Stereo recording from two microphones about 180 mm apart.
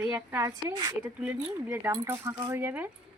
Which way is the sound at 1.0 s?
10° right (ahead or behind).